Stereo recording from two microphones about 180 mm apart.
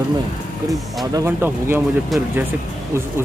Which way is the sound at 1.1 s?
15° right (ahead or behind).